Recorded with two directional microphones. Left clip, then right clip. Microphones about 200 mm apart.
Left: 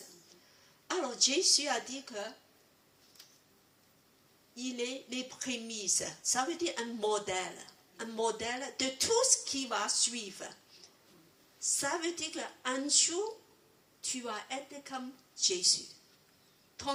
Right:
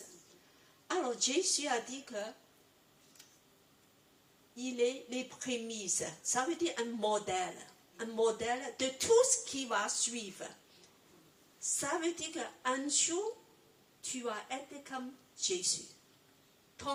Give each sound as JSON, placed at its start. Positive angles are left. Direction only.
{"t": 0.9, "sound": "speech", "side_deg": 25}
{"t": 4.5, "sound": "speech", "side_deg": 25}
{"t": 14.9, "sound": "speech", "side_deg": 25}